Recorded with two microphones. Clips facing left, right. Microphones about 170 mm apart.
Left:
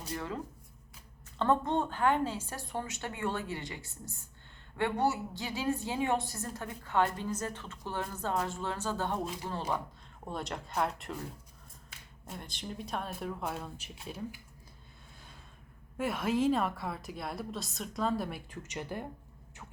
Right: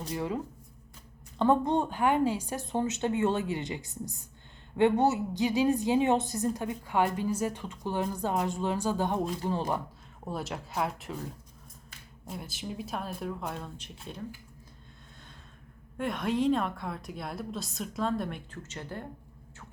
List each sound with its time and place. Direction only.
0.1 s a woman's voice: 15° right (ahead or behind)
10.2 s speech: 5° right (ahead or behind)
16.0 s speech: 5° left (ahead or behind)